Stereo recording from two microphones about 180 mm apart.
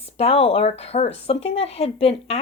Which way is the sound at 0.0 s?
35° left (ahead or behind).